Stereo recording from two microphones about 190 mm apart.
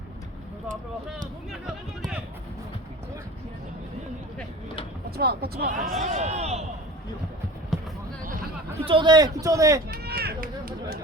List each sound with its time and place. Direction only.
1.6 s run: 5° right (ahead or behind)
5.1 s speech: 55° right (ahead or behind); by 6.7 s 35° right (ahead or behind)
8.8 s a man's voice: 25° right (ahead or behind)
9.9 s run: 55° right (ahead or behind)